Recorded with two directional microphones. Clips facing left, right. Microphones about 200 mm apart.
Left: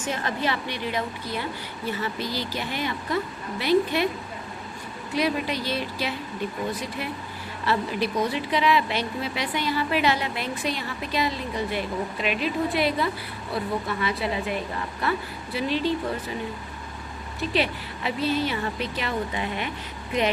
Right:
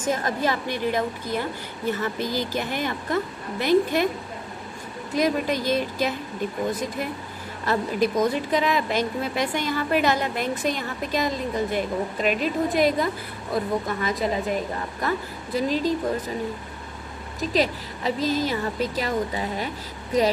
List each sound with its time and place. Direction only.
0.0 s a woman's voice: 40° right (ahead or behind)
5.1 s a woman's voice: 45° right (ahead or behind)
7.6 s a woman's voice: 45° right (ahead or behind)
17.4 s a woman's voice: 40° right (ahead or behind)